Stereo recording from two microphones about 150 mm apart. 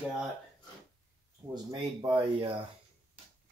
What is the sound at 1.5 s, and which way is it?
Speech, 30° right (ahead or behind).